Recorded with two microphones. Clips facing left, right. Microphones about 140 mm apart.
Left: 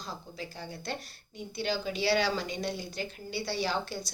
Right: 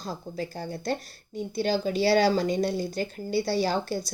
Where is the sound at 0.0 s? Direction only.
45° right (ahead or behind).